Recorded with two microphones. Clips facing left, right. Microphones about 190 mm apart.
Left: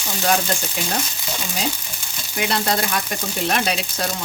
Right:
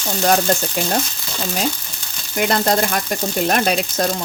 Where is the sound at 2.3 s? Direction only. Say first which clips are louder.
Right 5 dB; 50° right (ahead or behind).